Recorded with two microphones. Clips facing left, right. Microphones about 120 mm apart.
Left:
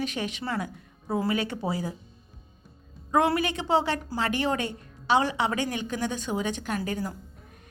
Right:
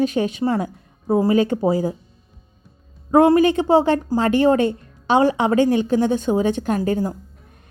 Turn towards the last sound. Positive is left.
turn(degrees=-40)  # may be behind; listen again after turning